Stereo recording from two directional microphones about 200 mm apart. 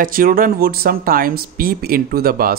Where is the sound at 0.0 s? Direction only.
45° right (ahead or behind).